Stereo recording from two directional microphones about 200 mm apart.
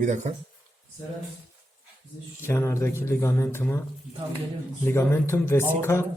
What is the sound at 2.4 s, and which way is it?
Speech, 15° left (ahead or behind).